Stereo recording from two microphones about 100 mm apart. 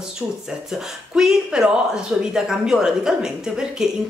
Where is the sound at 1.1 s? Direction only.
5° right (ahead or behind).